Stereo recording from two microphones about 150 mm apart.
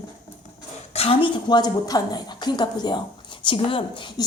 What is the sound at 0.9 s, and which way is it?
A woman's voice, 40° left (ahead or behind).